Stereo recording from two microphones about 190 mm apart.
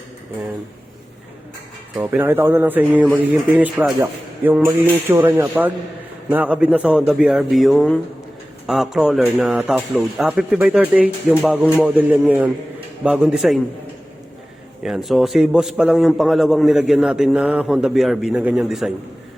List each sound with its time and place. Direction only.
2.0 s a man's voice: 10° right (ahead or behind)
14.8 s a man's voice: centre (ahead or behind)